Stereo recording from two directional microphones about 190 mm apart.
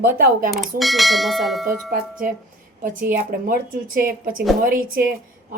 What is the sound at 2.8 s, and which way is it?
A woman's voice, 45° right (ahead or behind).